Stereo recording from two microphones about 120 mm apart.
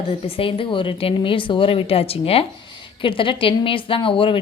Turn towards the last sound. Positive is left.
turn(degrees=45)  # may be behind; listen again after turning